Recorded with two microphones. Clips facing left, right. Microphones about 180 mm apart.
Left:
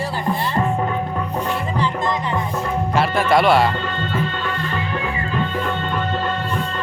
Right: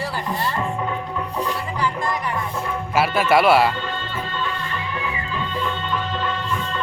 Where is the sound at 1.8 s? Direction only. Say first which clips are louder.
Left 1 dB; 20° left (ahead or behind).